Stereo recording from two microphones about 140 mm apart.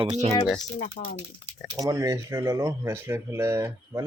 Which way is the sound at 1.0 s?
55° left (ahead or behind).